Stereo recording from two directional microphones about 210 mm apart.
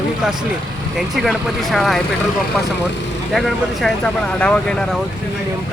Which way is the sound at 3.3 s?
Centre (ahead or behind).